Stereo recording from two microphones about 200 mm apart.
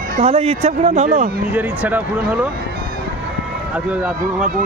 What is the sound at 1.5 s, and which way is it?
Speech, 5° right (ahead or behind).